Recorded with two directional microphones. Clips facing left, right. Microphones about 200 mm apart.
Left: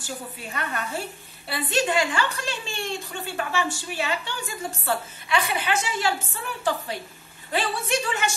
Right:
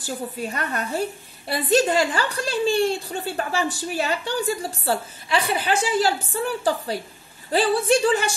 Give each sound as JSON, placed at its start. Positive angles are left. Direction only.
{"t": 0.0, "sound": "a woman's voice", "side_deg": -40}